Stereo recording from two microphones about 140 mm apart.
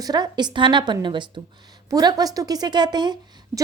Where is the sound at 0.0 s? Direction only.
30° right (ahead or behind).